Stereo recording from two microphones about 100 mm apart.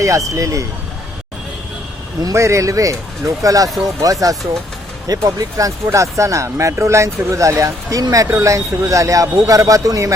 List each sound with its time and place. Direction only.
0.0 s speech: 35° right (ahead or behind)
2.2 s speech: 30° right (ahead or behind)